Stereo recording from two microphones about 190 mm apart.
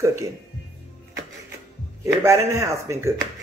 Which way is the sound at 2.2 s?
15° right (ahead or behind).